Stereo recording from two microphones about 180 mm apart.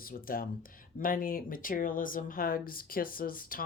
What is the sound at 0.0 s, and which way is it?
Speech, 55° left (ahead or behind).